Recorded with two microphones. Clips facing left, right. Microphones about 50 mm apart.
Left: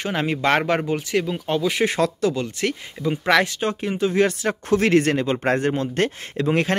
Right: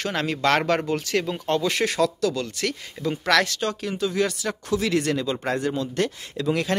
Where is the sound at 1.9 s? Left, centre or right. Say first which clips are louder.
Left 2 dB; left.